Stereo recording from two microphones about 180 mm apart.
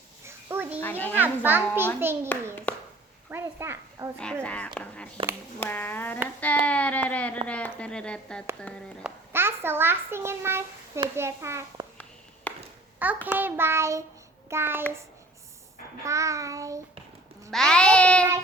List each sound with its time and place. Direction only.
0.3 s a sound: 15° right (ahead or behind)
0.8 s speech: 10° left (ahead or behind)
1.1 s child singing: 10° right (ahead or behind)
2.7 s a sound: 5° left (ahead or behind)
3.2 s a child's voice: 15° right (ahead or behind)
4.4 s speech: 5° left (ahead or behind)
9.0 s a child's voice: 10° right (ahead or behind)
11.1 s child singing: 15° right (ahead or behind)
12.5 s a sound: 10° left (ahead or behind)
13.0 s child singing: 10° right (ahead or behind)
16.0 s child singing: 15° right (ahead or behind)
17.5 s child singing: 5° left (ahead or behind)